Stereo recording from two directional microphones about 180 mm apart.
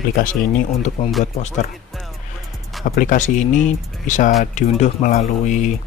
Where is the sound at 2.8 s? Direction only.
50° left (ahead or behind).